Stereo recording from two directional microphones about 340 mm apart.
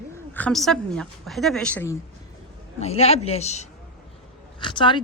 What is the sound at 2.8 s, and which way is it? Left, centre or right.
Speech, centre.